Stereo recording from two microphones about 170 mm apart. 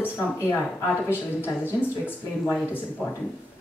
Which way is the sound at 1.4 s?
10° left (ahead or behind).